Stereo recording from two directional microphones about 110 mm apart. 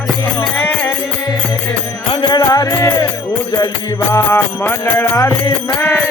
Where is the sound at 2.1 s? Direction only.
45° left (ahead or behind).